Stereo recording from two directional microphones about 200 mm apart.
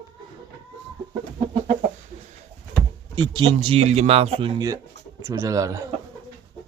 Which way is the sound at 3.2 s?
20° right (ahead or behind).